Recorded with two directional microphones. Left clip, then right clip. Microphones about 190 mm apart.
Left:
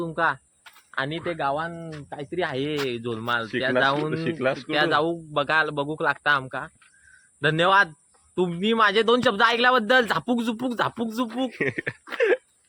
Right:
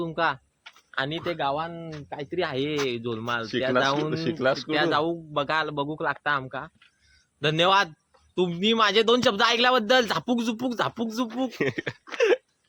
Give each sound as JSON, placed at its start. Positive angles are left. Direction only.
{"t": 0.0, "sound": "a man's voice", "side_deg": 10}
{"t": 0.6, "sound": "a man's voice", "side_deg": 20}
{"t": 4.1, "sound": "speech", "side_deg": -25}
{"t": 4.7, "sound": "a man's voice", "side_deg": 25}
{"t": 7.4, "sound": "a man's voice", "side_deg": 10}
{"t": 11.5, "sound": "speech", "side_deg": -20}